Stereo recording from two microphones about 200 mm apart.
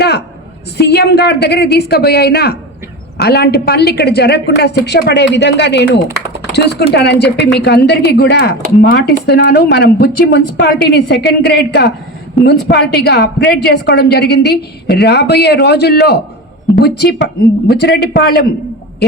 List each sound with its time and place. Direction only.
0.8 s a woman's voice: 55° left (ahead or behind)